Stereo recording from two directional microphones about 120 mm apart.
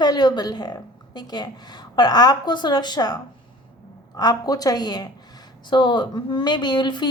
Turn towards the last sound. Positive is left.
turn(degrees=40)  # may be behind; listen again after turning